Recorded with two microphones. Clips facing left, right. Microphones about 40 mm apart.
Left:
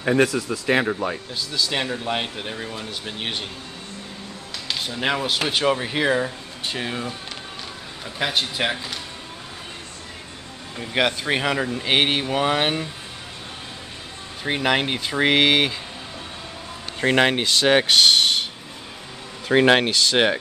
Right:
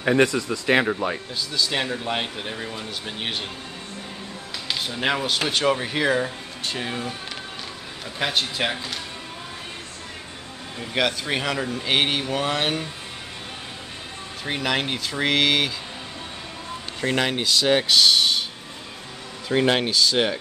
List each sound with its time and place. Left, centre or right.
0.0 s speech: centre
4.6 s speech: centre
8.2 s speech: centre
11.0 s speech: centre
14.4 s speech: centre
17.0 s speech: left
19.5 s speech: left